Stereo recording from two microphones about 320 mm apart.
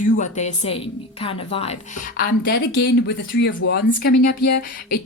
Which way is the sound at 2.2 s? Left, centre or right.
Left.